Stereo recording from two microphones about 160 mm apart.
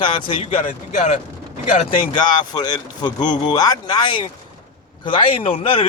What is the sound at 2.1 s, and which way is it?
A man's voice, 25° left (ahead or behind).